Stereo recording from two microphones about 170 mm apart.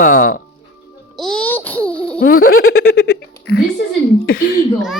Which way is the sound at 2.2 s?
60° left (ahead or behind).